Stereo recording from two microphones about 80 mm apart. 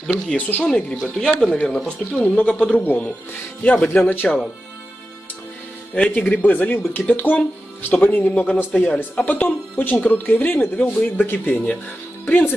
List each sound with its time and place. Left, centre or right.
0.0 s speech: centre
0.4 s speech: left
0.7 s speech: centre; by 4.4 s left
5.9 s speech: centre